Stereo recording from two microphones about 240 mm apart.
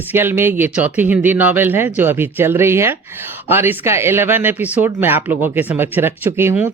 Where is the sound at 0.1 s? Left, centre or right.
Centre.